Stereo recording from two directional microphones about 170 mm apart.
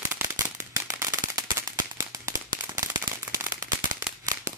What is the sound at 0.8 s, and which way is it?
Firecracker, 20° right (ahead or behind).